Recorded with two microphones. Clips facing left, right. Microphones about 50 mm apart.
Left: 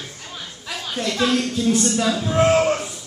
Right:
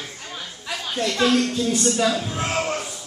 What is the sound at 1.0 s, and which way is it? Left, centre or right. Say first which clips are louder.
Speech: right 1 dB; centre.